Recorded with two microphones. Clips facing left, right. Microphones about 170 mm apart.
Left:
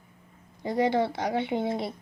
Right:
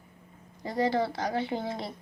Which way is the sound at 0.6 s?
20° left (ahead or behind).